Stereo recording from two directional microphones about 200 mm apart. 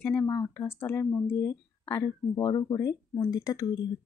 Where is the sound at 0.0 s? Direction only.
10° left (ahead or behind).